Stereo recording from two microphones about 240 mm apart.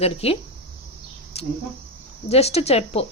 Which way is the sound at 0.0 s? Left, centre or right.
Left.